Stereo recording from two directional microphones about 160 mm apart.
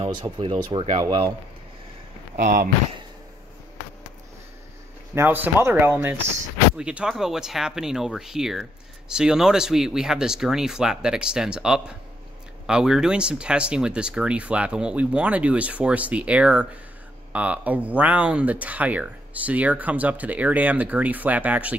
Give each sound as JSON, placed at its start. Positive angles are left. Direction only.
{"t": 0.0, "sound": "speech", "side_deg": -30}
{"t": 2.3, "sound": "speech", "side_deg": -60}
{"t": 5.1, "sound": "speech", "side_deg": -15}